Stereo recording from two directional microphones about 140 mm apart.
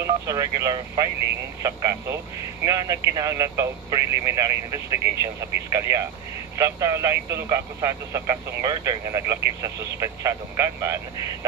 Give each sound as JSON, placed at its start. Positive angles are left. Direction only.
{"t": 0.0, "sound": "speech", "side_deg": -25}